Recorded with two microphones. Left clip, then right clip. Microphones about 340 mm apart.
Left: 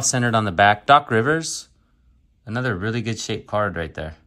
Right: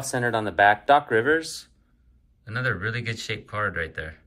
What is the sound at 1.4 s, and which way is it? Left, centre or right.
Speech, centre.